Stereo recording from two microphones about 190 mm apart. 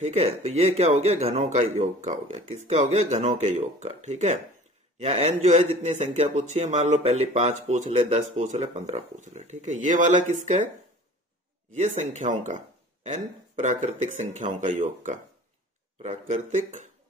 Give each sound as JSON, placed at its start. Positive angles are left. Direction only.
{"t": 0.0, "sound": "speech", "side_deg": -35}
{"t": 11.7, "sound": "speech", "side_deg": -40}